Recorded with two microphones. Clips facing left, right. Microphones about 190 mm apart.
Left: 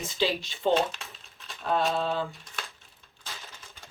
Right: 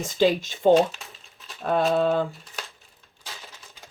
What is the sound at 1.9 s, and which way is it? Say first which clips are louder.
Speech: right 7 dB; 55° right (ahead or behind).